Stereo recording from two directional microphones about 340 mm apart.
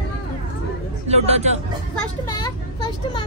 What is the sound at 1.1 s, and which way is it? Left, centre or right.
Speech, centre.